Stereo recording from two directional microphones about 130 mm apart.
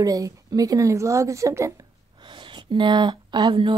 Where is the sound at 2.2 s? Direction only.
35° right (ahead or behind).